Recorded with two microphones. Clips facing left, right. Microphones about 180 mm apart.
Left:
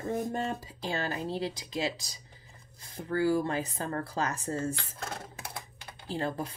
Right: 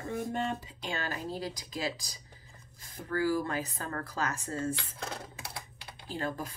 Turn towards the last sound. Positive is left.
turn(degrees=30)  # may be behind; listen again after turning